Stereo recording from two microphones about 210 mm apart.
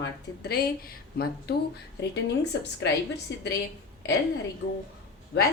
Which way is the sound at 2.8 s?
60° left (ahead or behind).